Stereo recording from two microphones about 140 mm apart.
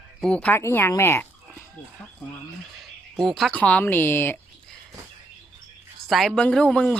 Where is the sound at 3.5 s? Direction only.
10° left (ahead or behind).